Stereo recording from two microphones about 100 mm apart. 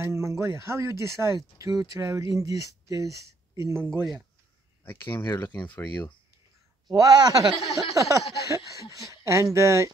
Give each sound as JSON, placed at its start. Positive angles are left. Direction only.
{"t": 0.0, "sound": "speech", "side_deg": -30}
{"t": 4.8, "sound": "speech", "side_deg": 20}
{"t": 6.9, "sound": "speech", "side_deg": -40}
{"t": 7.9, "sound": "a sound", "side_deg": -35}
{"t": 8.9, "sound": "speech", "side_deg": -30}